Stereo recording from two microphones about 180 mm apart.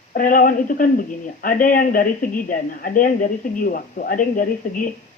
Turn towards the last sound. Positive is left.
turn(degrees=50)  # may be behind; listen again after turning